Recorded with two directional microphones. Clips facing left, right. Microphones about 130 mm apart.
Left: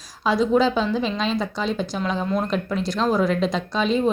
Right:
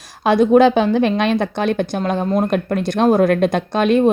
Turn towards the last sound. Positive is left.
turn(degrees=-60)  # may be behind; listen again after turning